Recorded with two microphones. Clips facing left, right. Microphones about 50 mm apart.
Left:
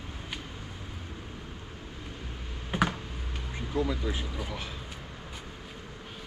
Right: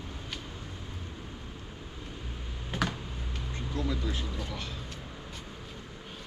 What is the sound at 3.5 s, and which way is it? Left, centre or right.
Speech, centre.